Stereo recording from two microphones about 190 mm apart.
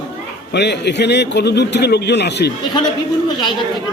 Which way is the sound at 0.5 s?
60° left (ahead or behind).